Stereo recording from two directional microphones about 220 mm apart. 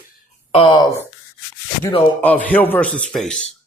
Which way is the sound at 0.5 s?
20° left (ahead or behind).